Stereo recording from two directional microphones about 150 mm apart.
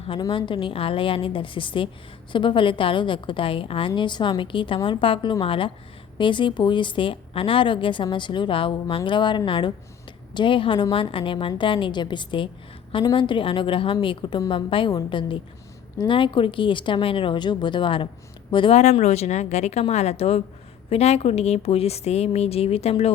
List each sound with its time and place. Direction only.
0.1 s speech: 35° left (ahead or behind)
18.8 s speech: 50° left (ahead or behind)